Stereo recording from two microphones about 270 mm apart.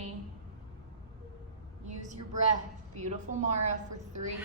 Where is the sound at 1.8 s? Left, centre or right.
Right.